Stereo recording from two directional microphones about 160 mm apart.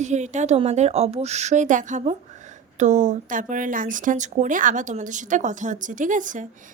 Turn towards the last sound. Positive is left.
turn(degrees=-55)  # may be behind; listen again after turning